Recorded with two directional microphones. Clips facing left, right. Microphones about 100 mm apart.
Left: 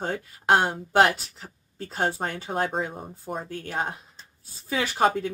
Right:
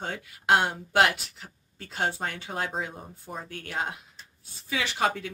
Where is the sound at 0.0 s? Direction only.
35° left (ahead or behind).